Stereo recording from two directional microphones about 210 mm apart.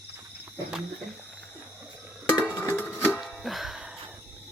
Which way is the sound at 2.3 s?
10° right (ahead or behind).